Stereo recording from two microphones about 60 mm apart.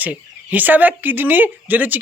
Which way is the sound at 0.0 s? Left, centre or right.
Right.